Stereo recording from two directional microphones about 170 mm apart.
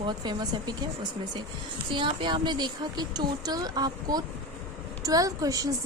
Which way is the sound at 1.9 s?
30° right (ahead or behind).